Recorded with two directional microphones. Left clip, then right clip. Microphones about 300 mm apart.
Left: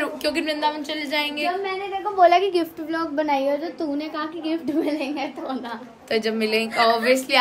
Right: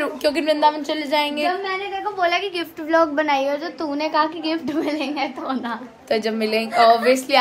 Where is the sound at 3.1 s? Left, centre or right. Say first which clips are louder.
Right 2 dB; right.